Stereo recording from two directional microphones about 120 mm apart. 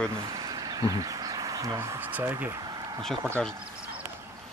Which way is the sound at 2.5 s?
35° right (ahead or behind).